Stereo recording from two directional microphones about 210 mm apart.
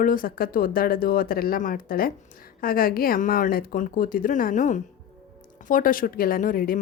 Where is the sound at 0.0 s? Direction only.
40° left (ahead or behind).